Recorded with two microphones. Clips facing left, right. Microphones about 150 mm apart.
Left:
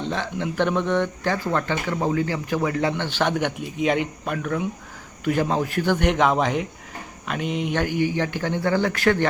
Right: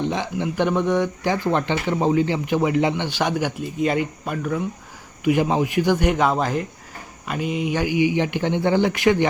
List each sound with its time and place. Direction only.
0.0 s speech: 15° right (ahead or behind)
5.2 s speech: 15° right (ahead or behind)
8.0 s speech: 20° right (ahead or behind)